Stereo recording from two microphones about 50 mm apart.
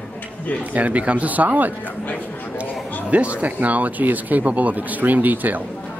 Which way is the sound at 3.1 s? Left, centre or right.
Right.